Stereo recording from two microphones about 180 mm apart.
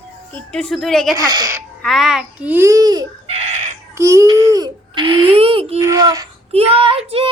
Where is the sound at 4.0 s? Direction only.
15° right (ahead or behind); by 5.8 s 30° right (ahead or behind).